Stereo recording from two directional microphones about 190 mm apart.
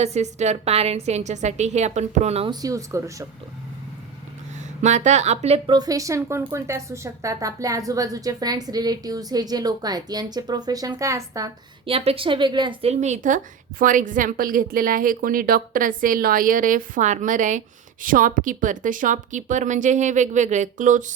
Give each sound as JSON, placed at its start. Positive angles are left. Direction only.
{"t": 0.0, "sound": "speech", "side_deg": -35}
{"t": 2.5, "sound": "speech", "side_deg": -20}
{"t": 4.8, "sound": "a woman's voice", "side_deg": -40}
{"t": 11.9, "sound": "a woman's voice", "side_deg": -30}